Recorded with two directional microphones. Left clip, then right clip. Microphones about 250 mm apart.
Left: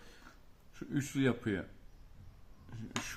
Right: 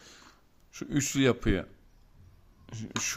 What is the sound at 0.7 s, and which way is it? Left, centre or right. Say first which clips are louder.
Speech: right 7 dB; right.